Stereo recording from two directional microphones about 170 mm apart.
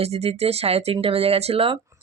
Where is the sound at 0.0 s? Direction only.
35° right (ahead or behind).